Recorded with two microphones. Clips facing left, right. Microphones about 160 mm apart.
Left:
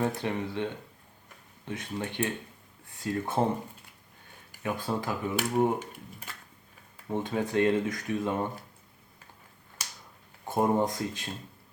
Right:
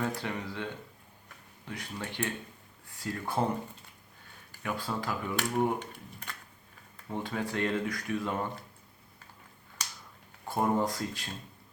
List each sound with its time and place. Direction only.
0.0 s speech: 20° left (ahead or behind)
4.6 s speech: 20° left (ahead or behind)
7.1 s speech: 20° left (ahead or behind)
10.5 s speech: 20° left (ahead or behind)